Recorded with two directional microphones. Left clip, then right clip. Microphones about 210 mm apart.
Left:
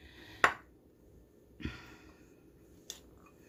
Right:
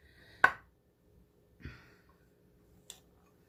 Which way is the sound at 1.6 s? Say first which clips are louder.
Left 8 dB; 50° left (ahead or behind).